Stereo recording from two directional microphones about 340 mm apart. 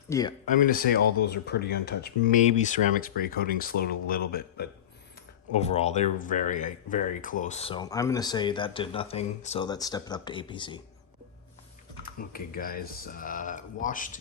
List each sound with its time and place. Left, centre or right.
0.1 s speech: centre
0.4 s speech: left
12.3 s speech: left